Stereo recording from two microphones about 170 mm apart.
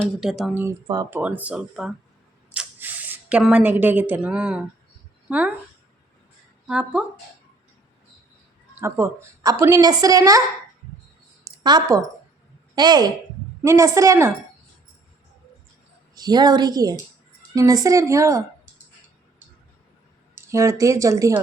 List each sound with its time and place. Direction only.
0.2 s speech: centre (ahead or behind)
6.7 s speech: 5° right (ahead or behind)
8.7 s a woman's voice: 15° right (ahead or behind)
11.4 s a woman's voice: 25° right (ahead or behind)
16.1 s a woman's voice: 25° right (ahead or behind)
20.3 s speech: 15° right (ahead or behind)